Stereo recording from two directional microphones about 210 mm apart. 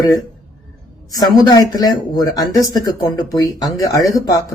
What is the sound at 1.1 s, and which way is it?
Speech, 20° left (ahead or behind).